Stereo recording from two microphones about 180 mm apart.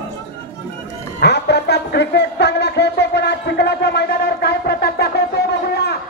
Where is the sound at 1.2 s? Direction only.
70° left (ahead or behind).